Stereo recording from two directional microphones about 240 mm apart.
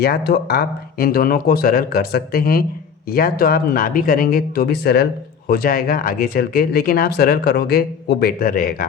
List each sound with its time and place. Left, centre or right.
0.0 s speech: left